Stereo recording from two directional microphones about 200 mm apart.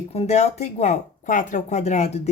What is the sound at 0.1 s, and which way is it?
Speech, 30° left (ahead or behind).